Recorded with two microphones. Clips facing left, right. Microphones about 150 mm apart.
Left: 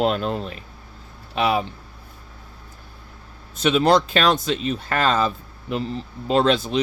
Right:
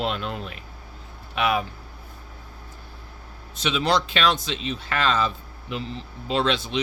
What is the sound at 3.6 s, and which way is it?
Speech, 45° left (ahead or behind).